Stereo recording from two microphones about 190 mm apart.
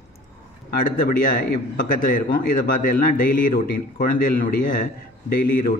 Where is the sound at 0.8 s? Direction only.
45° left (ahead or behind).